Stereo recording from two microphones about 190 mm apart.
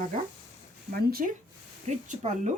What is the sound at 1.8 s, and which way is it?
Speech, 40° right (ahead or behind).